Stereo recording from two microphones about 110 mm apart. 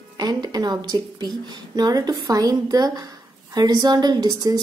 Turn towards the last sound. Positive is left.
turn(degrees=-35)  # may be behind; listen again after turning